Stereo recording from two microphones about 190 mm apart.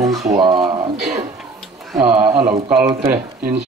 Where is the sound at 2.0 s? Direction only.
5° right (ahead or behind).